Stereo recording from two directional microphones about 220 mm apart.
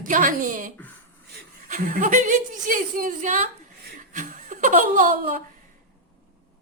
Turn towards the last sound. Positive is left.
turn(degrees=-40)  # may be behind; listen again after turning